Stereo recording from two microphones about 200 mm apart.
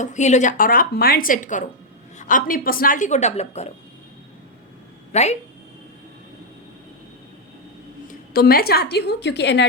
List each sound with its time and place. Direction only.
0.0 s speech: 35° left (ahead or behind)
5.1 s speech: 35° left (ahead or behind)
8.3 s a woman's voice: 50° left (ahead or behind)